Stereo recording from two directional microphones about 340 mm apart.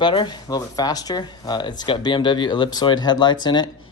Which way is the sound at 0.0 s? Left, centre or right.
Centre.